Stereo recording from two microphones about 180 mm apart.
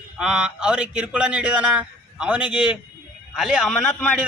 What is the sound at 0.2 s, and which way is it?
A man's voice, 5° right (ahead or behind).